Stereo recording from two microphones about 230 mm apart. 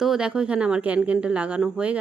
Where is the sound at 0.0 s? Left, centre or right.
Centre.